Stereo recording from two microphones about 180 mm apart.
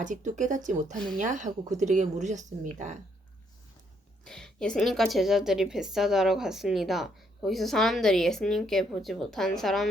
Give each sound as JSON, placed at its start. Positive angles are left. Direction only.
{"t": 0.0, "sound": "speech", "side_deg": -45}
{"t": 0.9, "sound": "a woman's voice", "side_deg": 5}
{"t": 1.2, "sound": "speech", "side_deg": -45}
{"t": 4.2, "sound": "a woman's voice", "side_deg": 5}